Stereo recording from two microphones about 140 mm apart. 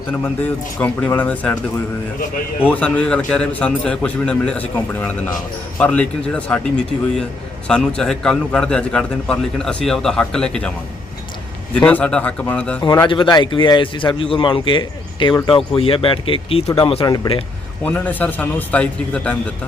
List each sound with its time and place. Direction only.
0.1 s a man's voice: 10° left (ahead or behind)
2.6 s a man's voice: 10° left (ahead or behind)
7.7 s a man's voice: 5° left (ahead or behind)
11.7 s a man's voice: 10° left (ahead or behind)
12.8 s speech: 25° left (ahead or behind)
13.1 s a man's voice: 35° left (ahead or behind)
17.8 s a man's voice: 10° left (ahead or behind)